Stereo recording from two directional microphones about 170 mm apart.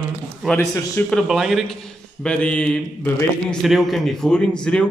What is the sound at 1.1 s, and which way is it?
A man's voice, centre (ahead or behind).